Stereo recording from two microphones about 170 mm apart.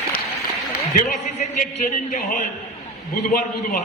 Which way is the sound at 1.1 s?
50° left (ahead or behind).